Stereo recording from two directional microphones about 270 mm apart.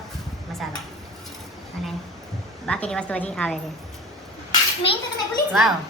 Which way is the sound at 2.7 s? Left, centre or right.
Centre.